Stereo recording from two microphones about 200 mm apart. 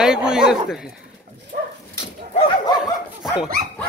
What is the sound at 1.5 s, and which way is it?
Dog, 45° right (ahead or behind).